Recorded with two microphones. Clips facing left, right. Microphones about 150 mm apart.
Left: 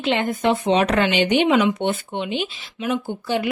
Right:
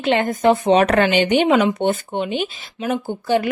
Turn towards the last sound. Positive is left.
turn(degrees=-45)  # may be behind; listen again after turning